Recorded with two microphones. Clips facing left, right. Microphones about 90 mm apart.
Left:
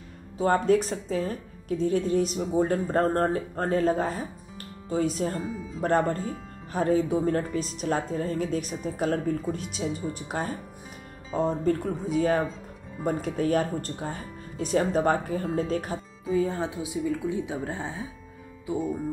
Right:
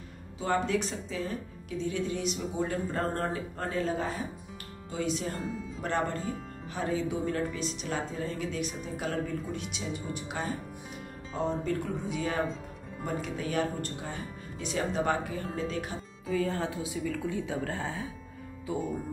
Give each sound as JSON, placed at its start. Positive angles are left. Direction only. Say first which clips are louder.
{"t": 0.4, "sound": "a woman's voice", "louder": "left 7 dB", "side_deg": 45}
{"t": 16.3, "sound": "a woman's voice", "louder": "left 4 dB", "side_deg": 20}